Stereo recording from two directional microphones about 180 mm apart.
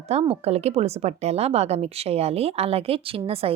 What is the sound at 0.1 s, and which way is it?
A woman's voice, 35° right (ahead or behind).